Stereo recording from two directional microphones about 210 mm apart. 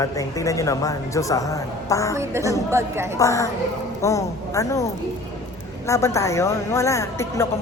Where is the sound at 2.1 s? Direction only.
15° right (ahead or behind).